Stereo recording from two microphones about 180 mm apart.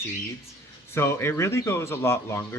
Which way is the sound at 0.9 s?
15° left (ahead or behind).